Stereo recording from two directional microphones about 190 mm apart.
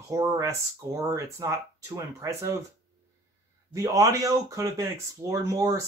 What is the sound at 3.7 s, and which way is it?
Speech, 20° right (ahead or behind).